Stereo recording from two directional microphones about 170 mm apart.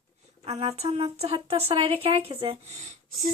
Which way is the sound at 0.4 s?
40° right (ahead or behind).